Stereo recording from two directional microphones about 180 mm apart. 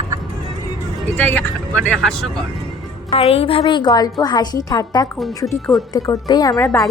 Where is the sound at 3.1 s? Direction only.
35° left (ahead or behind).